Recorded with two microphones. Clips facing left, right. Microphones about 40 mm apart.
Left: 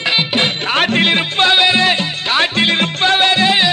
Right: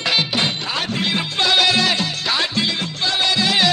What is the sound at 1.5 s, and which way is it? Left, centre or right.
Music, left.